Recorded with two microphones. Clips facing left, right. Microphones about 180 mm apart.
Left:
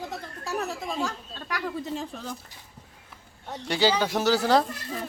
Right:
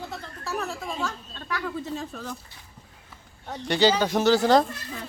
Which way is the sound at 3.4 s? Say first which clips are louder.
Right 3 dB; 10° left (ahead or behind).